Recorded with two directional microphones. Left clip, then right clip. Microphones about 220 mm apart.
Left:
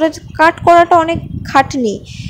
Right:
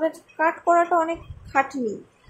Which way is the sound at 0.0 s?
35° left (ahead or behind).